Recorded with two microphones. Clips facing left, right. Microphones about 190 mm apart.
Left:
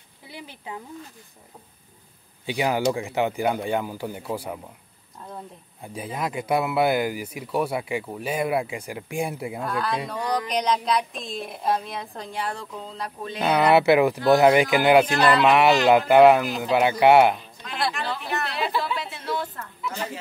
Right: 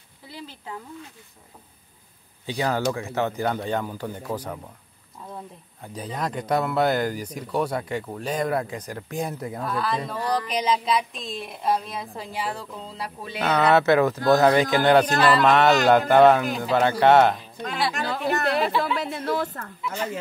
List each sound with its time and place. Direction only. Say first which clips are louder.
0.3 s speech: even; 15° left (ahead or behind)
2.4 s speech: left 2 dB; 15° left (ahead or behind)
5.8 s speech: even; 10° left (ahead or behind)
9.7 s a sound: right 1 dB; centre (ahead or behind)
13.4 s speech: left 1 dB; 10° left (ahead or behind)
17.9 s a sound: right 4 dB; 45° right (ahead or behind)
18.9 s speech: right 4 dB; 50° right (ahead or behind)